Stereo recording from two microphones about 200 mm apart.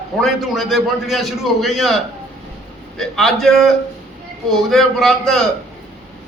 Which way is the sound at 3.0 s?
Centre (ahead or behind).